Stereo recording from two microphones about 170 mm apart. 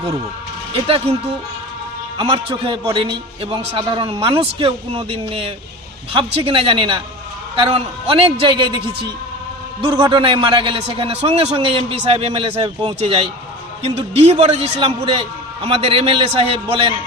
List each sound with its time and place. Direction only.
0.7 s a man's voice: 35° right (ahead or behind)
10.0 s a man's voice: 30° right (ahead or behind)